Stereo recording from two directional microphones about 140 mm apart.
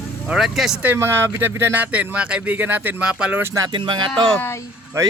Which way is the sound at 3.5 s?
25° right (ahead or behind).